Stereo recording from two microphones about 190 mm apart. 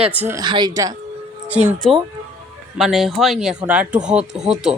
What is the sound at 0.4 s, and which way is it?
Speech, 25° right (ahead or behind).